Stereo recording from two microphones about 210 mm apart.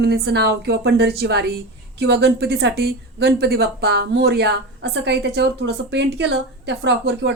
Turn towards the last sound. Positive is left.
turn(degrees=-55)  # may be behind; listen again after turning